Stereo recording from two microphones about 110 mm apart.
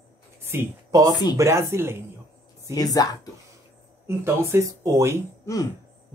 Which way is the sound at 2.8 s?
35° left (ahead or behind).